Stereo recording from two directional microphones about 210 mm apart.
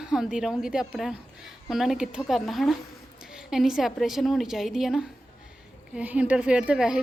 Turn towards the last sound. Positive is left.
turn(degrees=-5)  # may be behind; listen again after turning